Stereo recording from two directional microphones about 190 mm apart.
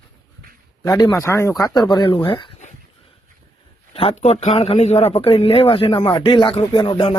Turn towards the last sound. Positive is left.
turn(degrees=25)  # may be behind; listen again after turning